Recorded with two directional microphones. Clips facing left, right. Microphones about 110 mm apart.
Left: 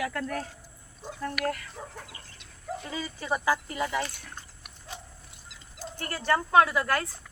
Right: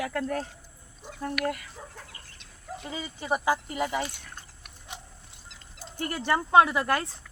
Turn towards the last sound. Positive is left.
turn(degrees=-25)  # may be behind; listen again after turning